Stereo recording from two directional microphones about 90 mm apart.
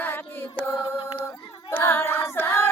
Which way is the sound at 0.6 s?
25° left (ahead or behind).